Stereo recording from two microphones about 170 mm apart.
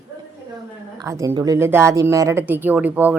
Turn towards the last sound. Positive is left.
turn(degrees=-10)  # may be behind; listen again after turning